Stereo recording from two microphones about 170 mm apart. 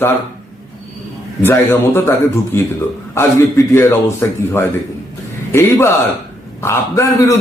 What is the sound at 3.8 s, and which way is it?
A man's voice, 15° left (ahead or behind).